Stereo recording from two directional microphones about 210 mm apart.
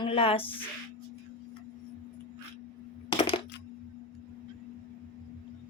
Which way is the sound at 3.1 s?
25° left (ahead or behind).